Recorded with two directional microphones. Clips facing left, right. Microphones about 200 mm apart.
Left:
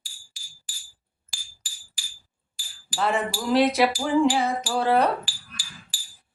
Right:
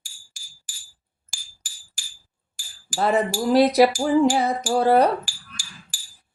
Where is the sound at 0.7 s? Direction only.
45° right (ahead or behind).